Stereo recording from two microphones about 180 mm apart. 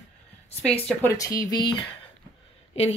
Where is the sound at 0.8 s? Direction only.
15° left (ahead or behind).